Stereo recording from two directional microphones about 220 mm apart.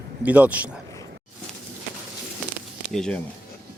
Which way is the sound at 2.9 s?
5° left (ahead or behind).